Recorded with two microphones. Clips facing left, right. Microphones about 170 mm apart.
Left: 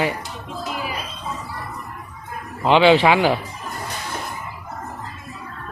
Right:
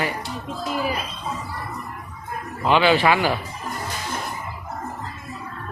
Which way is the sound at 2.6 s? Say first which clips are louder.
Left 4 dB; 20° left (ahead or behind).